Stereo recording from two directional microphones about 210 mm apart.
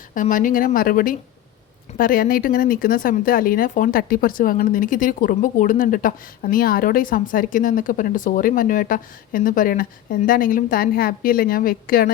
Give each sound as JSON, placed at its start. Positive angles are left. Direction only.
{"t": 0.1, "sound": "speech", "side_deg": 40}